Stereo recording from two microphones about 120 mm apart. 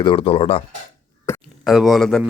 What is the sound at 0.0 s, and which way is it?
Speech, 45° left (ahead or behind).